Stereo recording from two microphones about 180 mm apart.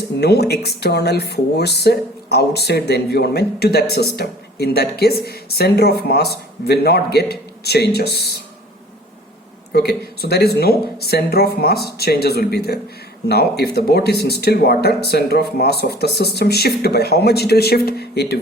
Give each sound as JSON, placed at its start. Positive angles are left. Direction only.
{"t": 0.2, "sound": "speech", "side_deg": 65}
{"t": 9.7, "sound": "speech", "side_deg": 65}